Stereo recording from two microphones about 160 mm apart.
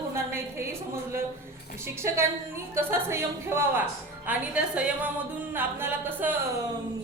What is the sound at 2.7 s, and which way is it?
A woman's voice, 15° right (ahead or behind).